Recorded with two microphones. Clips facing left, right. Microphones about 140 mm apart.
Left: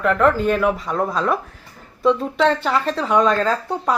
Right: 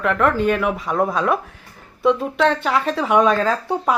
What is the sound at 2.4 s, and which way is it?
A woman's voice, centre (ahead or behind).